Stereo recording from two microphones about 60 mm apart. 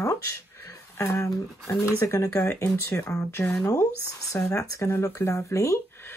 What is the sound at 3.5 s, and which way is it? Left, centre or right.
Speech, left.